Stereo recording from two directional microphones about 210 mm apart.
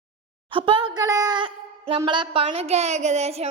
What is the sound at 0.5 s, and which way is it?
A woman's voice, 25° right (ahead or behind).